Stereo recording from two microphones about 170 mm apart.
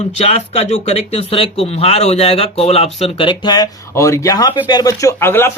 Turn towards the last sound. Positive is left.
turn(degrees=15)  # may be behind; listen again after turning